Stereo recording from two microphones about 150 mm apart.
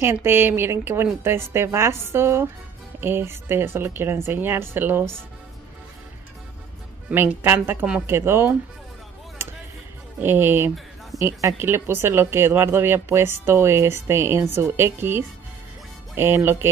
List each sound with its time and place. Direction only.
0.0 s speech: 15° right (ahead or behind)
7.1 s speech: 10° right (ahead or behind)
10.2 s speech: 15° right (ahead or behind)